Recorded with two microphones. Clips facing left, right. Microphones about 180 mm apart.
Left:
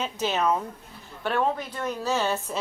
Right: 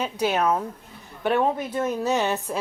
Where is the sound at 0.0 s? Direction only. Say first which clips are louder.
Right 3 dB; 10° right (ahead or behind).